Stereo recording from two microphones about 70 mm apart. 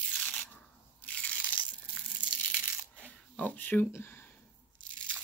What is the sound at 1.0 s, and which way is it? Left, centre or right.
Crushing, left.